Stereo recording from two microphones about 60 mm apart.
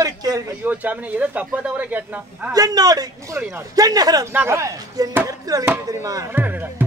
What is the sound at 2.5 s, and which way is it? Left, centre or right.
A man's voice, right.